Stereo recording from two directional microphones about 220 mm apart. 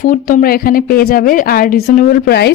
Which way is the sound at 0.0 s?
40° left (ahead or behind).